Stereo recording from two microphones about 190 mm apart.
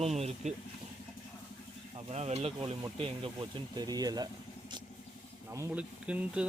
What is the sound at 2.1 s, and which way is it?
Speech, 35° right (ahead or behind).